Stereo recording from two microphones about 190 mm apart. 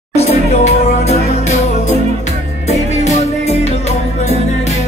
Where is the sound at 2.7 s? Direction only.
35° left (ahead or behind).